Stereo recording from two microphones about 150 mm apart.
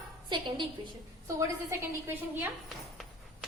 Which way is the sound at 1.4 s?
15° right (ahead or behind).